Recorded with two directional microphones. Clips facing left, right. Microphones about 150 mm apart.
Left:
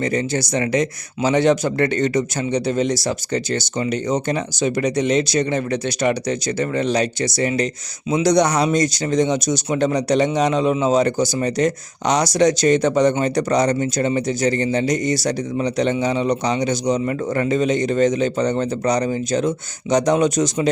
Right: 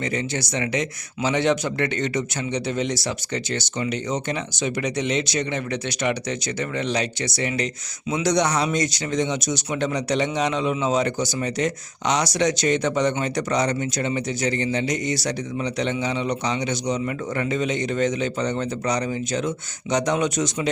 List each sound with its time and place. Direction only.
0.0 s speech: 40° left (ahead or behind)